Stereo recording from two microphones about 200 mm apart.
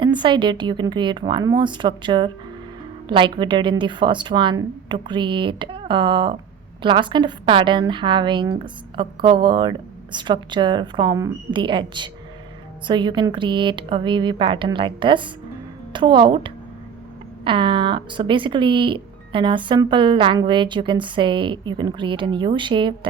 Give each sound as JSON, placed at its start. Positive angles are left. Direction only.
{"t": 0.0, "sound": "speech", "side_deg": -20}